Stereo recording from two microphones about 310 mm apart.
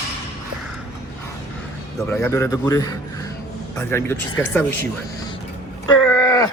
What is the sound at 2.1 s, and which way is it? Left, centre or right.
Speech, centre.